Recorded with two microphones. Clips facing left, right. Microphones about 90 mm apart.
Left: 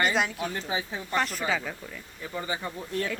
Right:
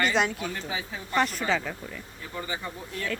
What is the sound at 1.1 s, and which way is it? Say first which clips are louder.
Speech: right 2 dB; centre (ahead or behind).